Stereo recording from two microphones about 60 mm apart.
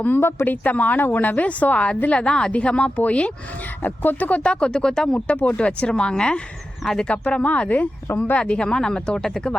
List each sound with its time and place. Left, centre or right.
0.0 s speech: left
4.4 s speech: centre
5.4 s speech: left